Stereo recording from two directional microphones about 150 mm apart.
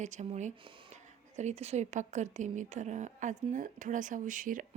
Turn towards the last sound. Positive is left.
turn(degrees=-60)  # may be behind; listen again after turning